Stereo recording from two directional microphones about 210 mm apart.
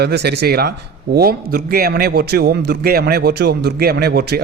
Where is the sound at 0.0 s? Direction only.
50° right (ahead or behind).